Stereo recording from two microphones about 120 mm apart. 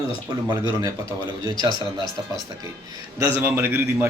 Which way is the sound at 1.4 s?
30° right (ahead or behind).